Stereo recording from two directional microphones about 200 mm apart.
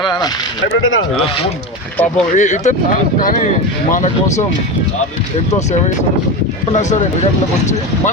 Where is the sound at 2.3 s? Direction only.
35° left (ahead or behind).